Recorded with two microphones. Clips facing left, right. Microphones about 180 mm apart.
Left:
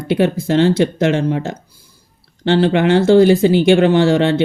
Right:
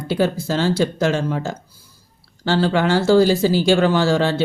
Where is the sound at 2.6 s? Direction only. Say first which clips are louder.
Left 4 dB; 20° left (ahead or behind).